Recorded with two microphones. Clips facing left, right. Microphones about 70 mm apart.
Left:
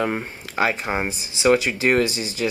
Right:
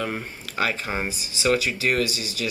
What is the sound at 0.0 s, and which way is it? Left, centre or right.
Speech, left.